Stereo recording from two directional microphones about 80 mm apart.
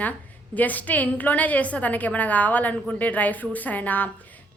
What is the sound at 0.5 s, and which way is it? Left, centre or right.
A woman's voice, left.